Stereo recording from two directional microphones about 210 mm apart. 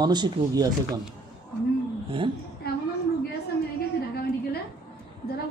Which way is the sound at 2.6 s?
50° left (ahead or behind).